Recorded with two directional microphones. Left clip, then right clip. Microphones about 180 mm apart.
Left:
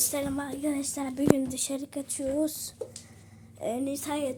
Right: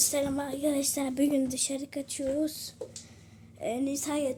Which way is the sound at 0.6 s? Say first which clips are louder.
Right 4 dB; 25° right (ahead or behind).